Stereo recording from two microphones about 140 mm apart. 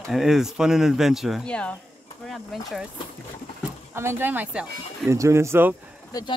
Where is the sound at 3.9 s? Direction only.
15° right (ahead or behind).